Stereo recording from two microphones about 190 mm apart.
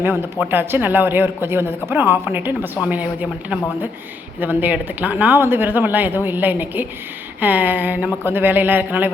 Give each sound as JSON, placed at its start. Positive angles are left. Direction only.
{"t": 0.0, "sound": "speech", "side_deg": -10}